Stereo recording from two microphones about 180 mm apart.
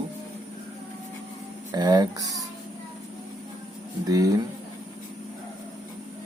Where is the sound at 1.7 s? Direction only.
20° right (ahead or behind).